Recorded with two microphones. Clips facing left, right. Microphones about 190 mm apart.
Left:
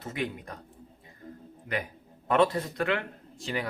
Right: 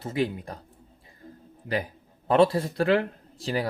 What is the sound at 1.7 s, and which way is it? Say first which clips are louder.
Speech: right 4 dB; 30° right (ahead or behind).